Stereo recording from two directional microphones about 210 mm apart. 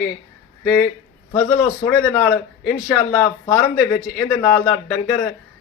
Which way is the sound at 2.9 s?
10° left (ahead or behind).